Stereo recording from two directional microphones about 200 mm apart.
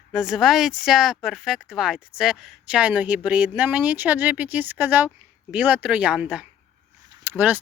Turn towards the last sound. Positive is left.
turn(degrees=-10)  # may be behind; listen again after turning